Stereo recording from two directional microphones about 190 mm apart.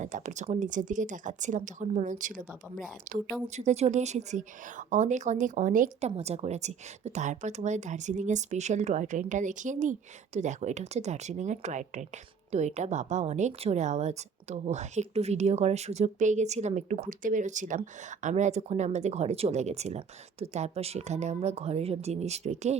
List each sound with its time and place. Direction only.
0.0 s speech: 40° right (ahead or behind)